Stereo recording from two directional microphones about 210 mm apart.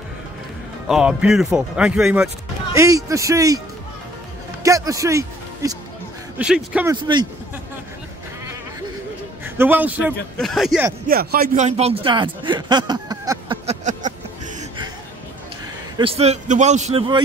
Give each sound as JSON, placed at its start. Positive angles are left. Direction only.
{"t": 0.8, "sound": "speech", "side_deg": 0}
{"t": 2.7, "sound": "a man's voice", "side_deg": -15}
{"t": 4.6, "sound": "a man's voice", "side_deg": -15}
{"t": 9.4, "sound": "a man's voice", "side_deg": -10}
{"t": 11.1, "sound": "speech", "side_deg": -45}
{"t": 13.7, "sound": "a sound", "side_deg": -35}
{"t": 16.0, "sound": "a man's voice", "side_deg": -30}